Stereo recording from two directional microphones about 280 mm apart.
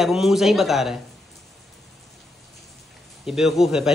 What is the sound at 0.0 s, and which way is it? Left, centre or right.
Speech, centre.